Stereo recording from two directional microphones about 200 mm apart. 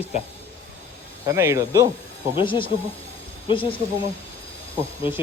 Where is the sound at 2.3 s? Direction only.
25° left (ahead or behind).